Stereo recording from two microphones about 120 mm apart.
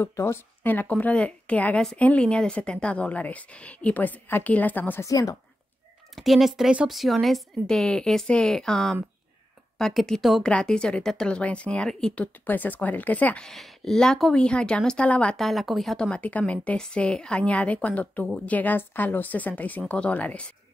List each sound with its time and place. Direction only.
0.0 s a woman's voice: 20° left (ahead or behind)
5.0 s a woman's voice: 25° left (ahead or behind)
6.1 s a woman's voice: centre (ahead or behind)
16.1 s a woman's voice: 15° left (ahead or behind)